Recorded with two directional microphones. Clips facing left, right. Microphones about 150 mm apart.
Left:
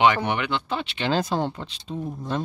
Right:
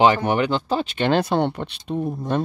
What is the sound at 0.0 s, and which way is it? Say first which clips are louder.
Speech: right 4 dB; 40° right (ahead or behind).